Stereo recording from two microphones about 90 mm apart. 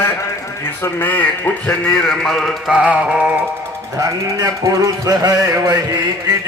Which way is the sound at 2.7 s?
10° right (ahead or behind).